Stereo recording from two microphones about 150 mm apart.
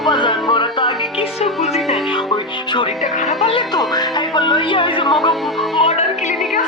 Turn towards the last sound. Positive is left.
turn(degrees=50)  # may be behind; listen again after turning